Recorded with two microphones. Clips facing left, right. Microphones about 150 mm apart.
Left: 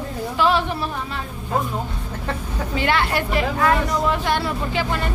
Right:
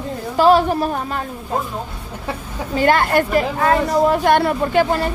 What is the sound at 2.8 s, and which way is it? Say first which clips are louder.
A woman's voice: right 6 dB; 45° right (ahead or behind).